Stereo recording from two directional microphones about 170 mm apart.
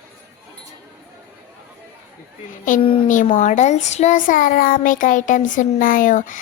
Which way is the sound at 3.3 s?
45° left (ahead or behind).